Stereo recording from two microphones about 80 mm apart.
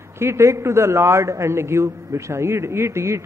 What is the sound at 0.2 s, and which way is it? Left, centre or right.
A woman's voice, right.